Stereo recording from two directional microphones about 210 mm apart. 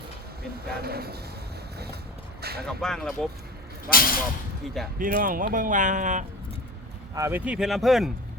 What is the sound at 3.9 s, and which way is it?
Speech, 45° left (ahead or behind).